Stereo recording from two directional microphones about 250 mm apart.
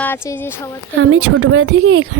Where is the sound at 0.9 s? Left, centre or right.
Right.